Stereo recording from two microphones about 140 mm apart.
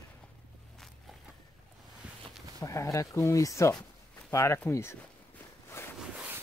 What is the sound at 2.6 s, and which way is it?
Speech, 20° left (ahead or behind).